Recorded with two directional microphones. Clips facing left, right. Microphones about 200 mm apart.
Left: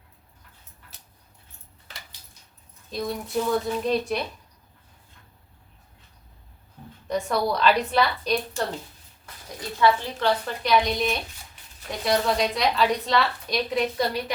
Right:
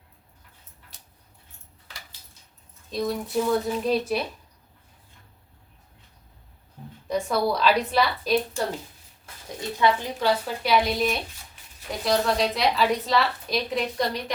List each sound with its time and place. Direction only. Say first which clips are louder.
2.9 s a woman's voice: right 2 dB; centre (ahead or behind)
7.1 s a woman's voice: right 1 dB; centre (ahead or behind)
9.6 s a woman's voice: left 1 dB; 20° right (ahead or behind); by 14.3 s 5° left (ahead or behind)